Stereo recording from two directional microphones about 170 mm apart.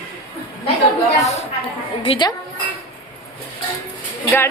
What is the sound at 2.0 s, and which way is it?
Speech, 30° left (ahead or behind).